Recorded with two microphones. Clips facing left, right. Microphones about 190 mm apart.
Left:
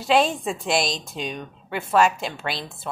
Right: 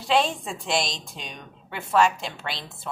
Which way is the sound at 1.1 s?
Centre (ahead or behind).